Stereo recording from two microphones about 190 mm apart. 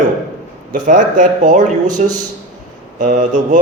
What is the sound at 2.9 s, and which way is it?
Speech, 40° right (ahead or behind).